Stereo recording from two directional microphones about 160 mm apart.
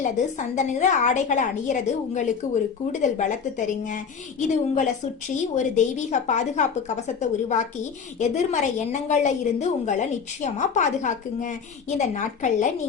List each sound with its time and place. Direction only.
0.0 s a woman's voice: 50° left (ahead or behind)